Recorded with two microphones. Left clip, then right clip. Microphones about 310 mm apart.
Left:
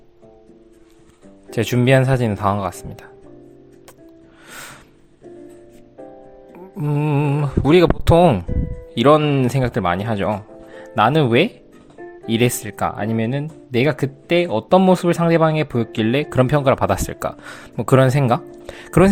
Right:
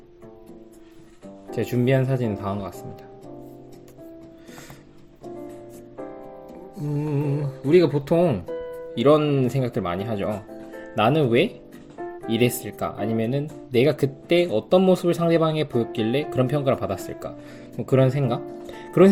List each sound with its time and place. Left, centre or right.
1.5 s speech: left
6.8 s speech: left
11.9 s music: right
12.3 s speech: left
18.6 s music: left